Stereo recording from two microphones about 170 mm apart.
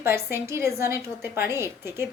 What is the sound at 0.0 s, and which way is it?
A woman's voice, 15° right (ahead or behind).